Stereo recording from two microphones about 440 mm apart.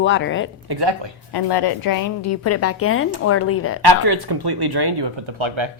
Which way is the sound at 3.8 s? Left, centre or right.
Right.